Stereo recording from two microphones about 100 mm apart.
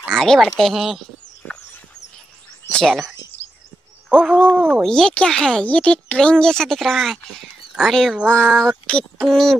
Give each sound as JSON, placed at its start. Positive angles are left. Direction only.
{"t": 0.0, "sound": "speech", "side_deg": 5}
{"t": 1.4, "sound": "a sound", "side_deg": 20}
{"t": 2.7, "sound": "speech", "side_deg": 5}
{"t": 4.2, "sound": "speech", "side_deg": -15}
{"t": 4.8, "sound": "speech", "side_deg": 10}